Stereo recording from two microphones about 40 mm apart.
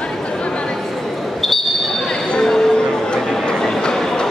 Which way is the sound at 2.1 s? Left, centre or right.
Left.